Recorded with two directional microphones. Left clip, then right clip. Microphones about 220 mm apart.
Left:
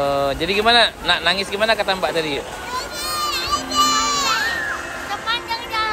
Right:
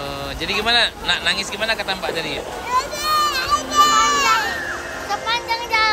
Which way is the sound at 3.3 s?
Centre (ahead or behind).